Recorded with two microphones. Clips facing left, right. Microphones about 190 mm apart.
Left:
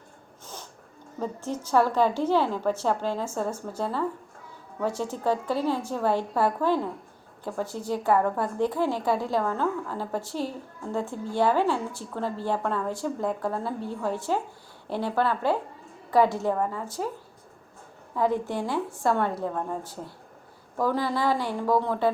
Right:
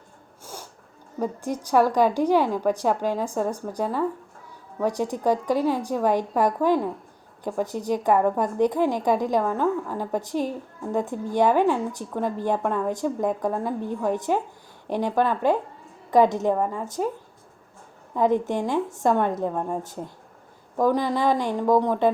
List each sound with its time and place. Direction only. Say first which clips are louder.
0.4 s sneeze: right 3 dB; 10° right (ahead or behind)
1.2 s speech: right 4 dB; 15° right (ahead or behind)
18.1 s a woman's voice: right 4 dB; 20° right (ahead or behind)